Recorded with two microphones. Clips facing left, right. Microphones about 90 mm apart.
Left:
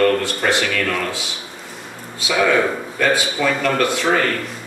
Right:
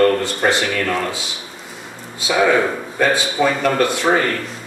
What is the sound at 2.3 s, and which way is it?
A man's voice, 20° right (ahead or behind).